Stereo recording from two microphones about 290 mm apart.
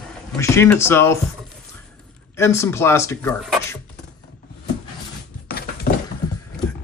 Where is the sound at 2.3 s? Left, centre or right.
Centre.